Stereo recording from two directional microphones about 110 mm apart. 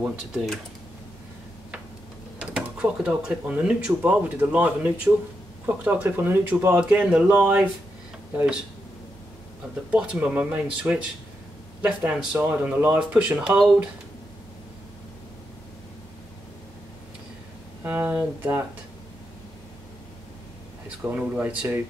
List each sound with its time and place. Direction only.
0.0 s speech: 10° right (ahead or behind)
2.3 s speech: 10° right (ahead or behind)
9.8 s speech: 10° right (ahead or behind)
12.0 s speech: 15° right (ahead or behind)
17.8 s speech: 15° right (ahead or behind)
21.0 s speech: 20° right (ahead or behind)